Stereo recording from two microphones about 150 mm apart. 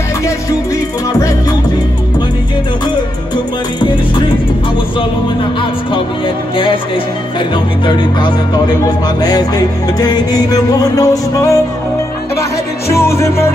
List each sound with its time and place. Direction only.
5.6 s speech: 35° left (ahead or behind)
7.3 s music: 30° left (ahead or behind)